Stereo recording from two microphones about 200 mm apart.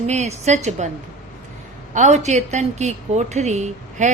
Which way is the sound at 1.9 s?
35° right (ahead or behind).